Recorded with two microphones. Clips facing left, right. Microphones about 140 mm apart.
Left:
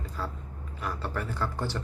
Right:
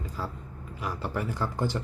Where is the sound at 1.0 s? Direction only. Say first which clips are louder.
Right 2 dB; 15° right (ahead or behind).